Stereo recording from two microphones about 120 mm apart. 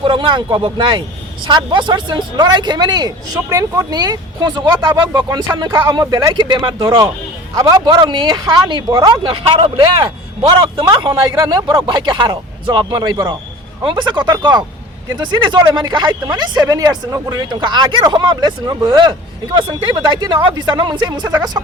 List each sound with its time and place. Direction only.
0.0 s speech: 40° right (ahead or behind)